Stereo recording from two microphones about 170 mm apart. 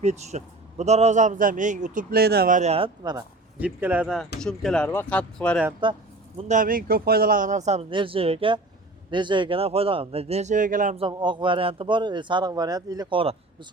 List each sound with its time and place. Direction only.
0.0 s a man's voice: 40° right (ahead or behind); by 2.6 s 65° right (ahead or behind)
2.6 s speech: 35° right (ahead or behind)
3.0 s speech: 20° right (ahead or behind)
3.6 s speech: 10° right (ahead or behind); by 5.5 s 5° left (ahead or behind)
5.8 s a sound: 30° right (ahead or behind)
6.5 s a man's voice: 55° right (ahead or behind)
10.9 s speech: 30° right (ahead or behind)